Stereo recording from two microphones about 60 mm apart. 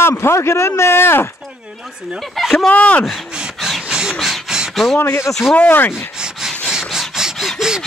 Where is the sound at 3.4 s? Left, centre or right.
Centre.